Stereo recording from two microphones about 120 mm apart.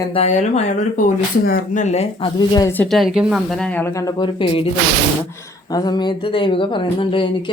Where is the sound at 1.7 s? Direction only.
75° left (ahead or behind).